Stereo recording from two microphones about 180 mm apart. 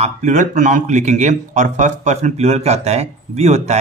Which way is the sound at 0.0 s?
40° right (ahead or behind).